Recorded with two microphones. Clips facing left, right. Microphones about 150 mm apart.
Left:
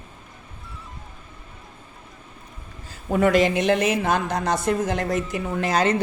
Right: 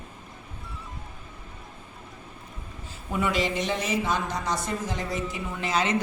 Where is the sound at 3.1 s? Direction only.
55° left (ahead or behind).